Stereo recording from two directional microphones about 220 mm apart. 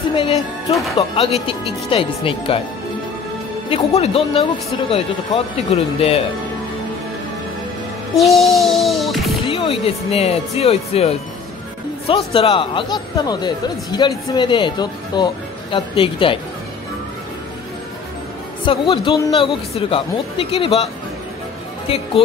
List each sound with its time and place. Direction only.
0.1 s music: 25° left (ahead or behind)
0.9 s a man's voice: 25° left (ahead or behind)
3.7 s a man's voice: 25° left (ahead or behind)
8.2 s music: centre (ahead or behind)
9.5 s a man's voice: 25° left (ahead or behind)
12.3 s a man's voice: 25° left (ahead or behind)
18.6 s a man's voice: 25° left (ahead or behind)